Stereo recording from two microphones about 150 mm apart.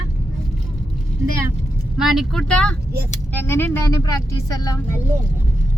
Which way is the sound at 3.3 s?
15° left (ahead or behind).